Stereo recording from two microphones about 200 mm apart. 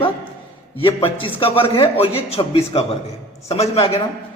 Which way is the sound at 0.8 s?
25° left (ahead or behind).